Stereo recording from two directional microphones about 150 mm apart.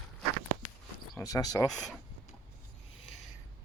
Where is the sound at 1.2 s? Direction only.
25° left (ahead or behind).